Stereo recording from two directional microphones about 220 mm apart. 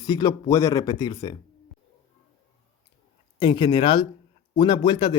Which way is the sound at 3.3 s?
20° left (ahead or behind).